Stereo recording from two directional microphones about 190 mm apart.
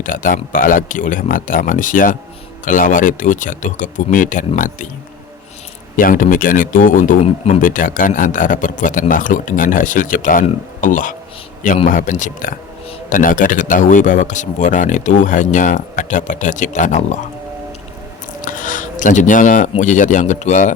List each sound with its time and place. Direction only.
0.0 s speech: 45° left (ahead or behind)
6.0 s speech: 45° left (ahead or behind)
18.4 s speech: 45° left (ahead or behind)